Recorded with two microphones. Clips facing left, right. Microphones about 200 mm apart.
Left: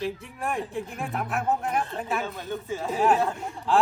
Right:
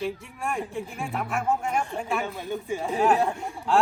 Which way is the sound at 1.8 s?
10° right (ahead or behind).